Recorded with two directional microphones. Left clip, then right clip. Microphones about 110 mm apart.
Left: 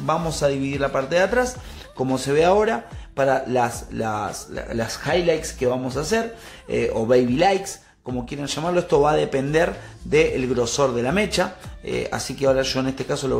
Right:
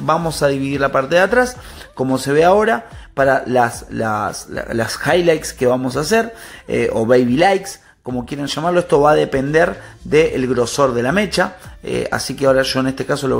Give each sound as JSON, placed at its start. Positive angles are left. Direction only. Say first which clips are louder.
{"t": 0.0, "sound": "speech", "louder": "right 5 dB", "side_deg": -35}